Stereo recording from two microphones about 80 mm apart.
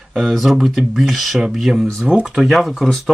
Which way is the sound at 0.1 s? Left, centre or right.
Centre.